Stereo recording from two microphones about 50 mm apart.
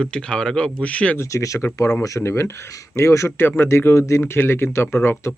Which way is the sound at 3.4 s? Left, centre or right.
Left.